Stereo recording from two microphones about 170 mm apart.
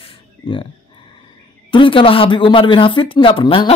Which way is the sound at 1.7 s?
30° left (ahead or behind).